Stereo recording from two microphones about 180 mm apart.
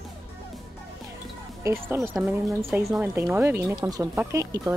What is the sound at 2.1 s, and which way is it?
Speech, centre (ahead or behind).